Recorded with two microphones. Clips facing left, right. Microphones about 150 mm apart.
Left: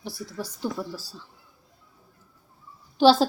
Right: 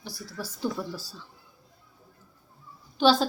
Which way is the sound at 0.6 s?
5° left (ahead or behind).